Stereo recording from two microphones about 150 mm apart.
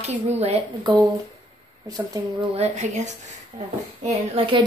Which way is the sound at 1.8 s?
25° right (ahead or behind).